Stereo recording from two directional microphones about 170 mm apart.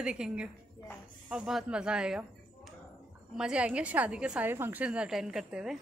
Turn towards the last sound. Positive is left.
turn(degrees=-5)  # may be behind; listen again after turning